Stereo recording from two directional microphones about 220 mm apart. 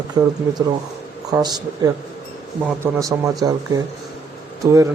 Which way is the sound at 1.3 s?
15° right (ahead or behind).